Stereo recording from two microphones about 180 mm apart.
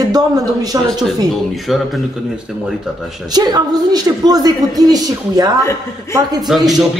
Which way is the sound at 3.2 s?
20° right (ahead or behind).